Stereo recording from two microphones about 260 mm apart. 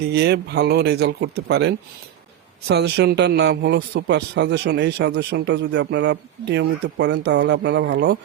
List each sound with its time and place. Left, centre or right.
0.0 s speech: right